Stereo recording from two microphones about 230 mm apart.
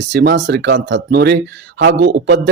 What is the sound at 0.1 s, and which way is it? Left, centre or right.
A man's voice, right.